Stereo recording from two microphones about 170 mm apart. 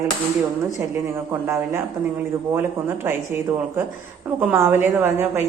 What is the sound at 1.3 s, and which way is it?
Speech, 15° right (ahead or behind).